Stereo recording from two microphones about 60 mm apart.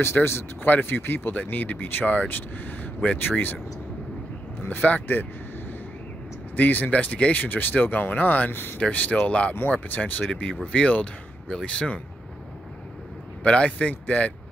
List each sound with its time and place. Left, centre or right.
0.0 s speech: left
4.6 s speech: left
6.5 s speech: left
8.7 s speech: left
13.4 s speech: left